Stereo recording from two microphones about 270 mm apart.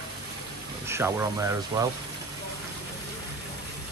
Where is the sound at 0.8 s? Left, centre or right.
Centre.